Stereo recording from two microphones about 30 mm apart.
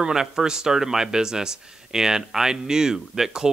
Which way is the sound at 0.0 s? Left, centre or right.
Centre.